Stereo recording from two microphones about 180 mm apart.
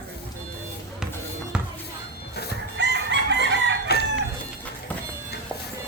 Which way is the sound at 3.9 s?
60° left (ahead or behind).